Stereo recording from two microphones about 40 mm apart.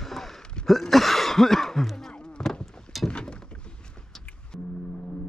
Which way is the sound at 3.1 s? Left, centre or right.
Left.